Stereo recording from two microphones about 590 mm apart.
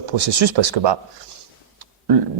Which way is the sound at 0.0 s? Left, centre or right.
Right.